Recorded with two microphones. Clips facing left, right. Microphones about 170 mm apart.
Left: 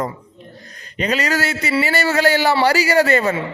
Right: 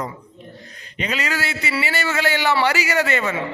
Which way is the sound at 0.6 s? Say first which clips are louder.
Left 6 dB; 40° left (ahead or behind).